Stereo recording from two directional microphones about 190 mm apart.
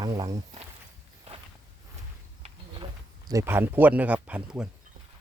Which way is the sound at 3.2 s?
15° right (ahead or behind).